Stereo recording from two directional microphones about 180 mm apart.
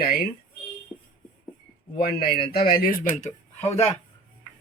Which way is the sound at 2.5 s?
55° left (ahead or behind).